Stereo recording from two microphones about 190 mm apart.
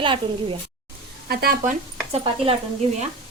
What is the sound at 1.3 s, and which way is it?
Speech, 55° right (ahead or behind).